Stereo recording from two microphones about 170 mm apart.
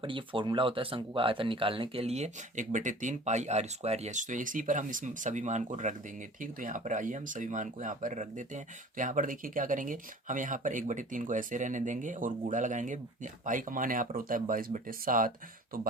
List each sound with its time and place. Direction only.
0.0 s speech: 30° right (ahead or behind); by 15.9 s 55° right (ahead or behind)